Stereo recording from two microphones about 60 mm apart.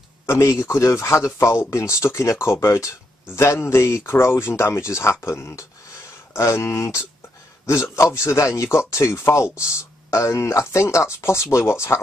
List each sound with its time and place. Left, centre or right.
0.3 s speech: left
3.3 s speech: left